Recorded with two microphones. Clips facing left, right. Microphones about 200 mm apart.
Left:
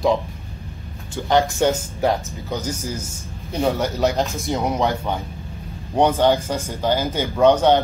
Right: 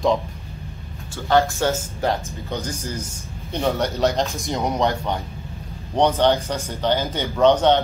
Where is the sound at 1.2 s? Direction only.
15° left (ahead or behind); by 5.2 s centre (ahead or behind).